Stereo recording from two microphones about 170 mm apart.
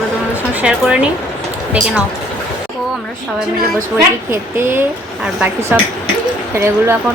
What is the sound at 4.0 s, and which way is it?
Speech, 15° right (ahead or behind).